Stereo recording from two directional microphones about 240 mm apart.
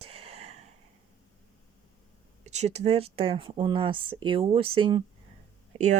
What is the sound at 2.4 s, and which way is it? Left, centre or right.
Speech, right.